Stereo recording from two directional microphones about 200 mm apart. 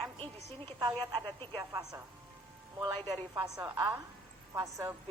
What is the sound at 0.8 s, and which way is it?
A woman's voice, 25° right (ahead or behind).